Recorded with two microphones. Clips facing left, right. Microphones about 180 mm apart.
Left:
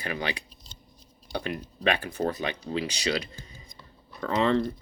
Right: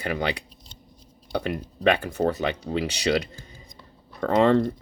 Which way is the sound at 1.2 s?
55° right (ahead or behind).